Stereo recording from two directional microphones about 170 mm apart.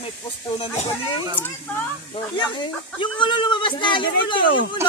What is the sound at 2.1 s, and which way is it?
Speech, 25° left (ahead or behind).